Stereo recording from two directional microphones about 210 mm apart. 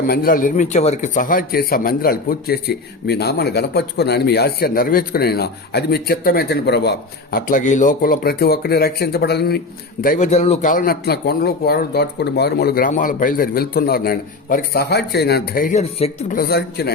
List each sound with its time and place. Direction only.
0.1 s a man's voice: 45° left (ahead or behind)
10.0 s a man's voice: 40° left (ahead or behind)
16.3 s a man's voice: 45° left (ahead or behind)